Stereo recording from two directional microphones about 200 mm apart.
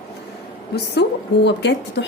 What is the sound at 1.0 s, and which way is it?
Speech, 55° left (ahead or behind).